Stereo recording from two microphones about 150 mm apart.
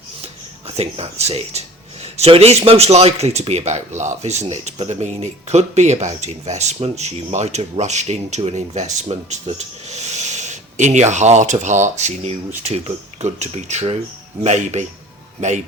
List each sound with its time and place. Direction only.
0.8 s speech: 45° right (ahead or behind)